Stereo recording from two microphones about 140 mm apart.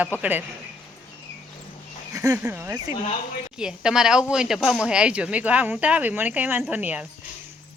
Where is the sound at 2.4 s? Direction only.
15° right (ahead or behind).